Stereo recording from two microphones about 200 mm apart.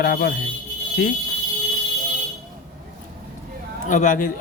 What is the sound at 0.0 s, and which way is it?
Speech, 50° left (ahead or behind).